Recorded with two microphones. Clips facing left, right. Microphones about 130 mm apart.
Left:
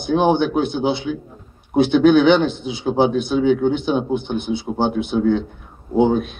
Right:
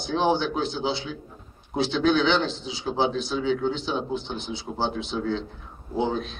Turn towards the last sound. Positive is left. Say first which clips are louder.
# left 10 dB
turn(degrees=55)  # may be behind; listen again after turning